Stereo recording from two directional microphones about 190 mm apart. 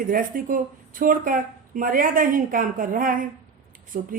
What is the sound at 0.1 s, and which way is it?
A woman's voice, 45° right (ahead or behind).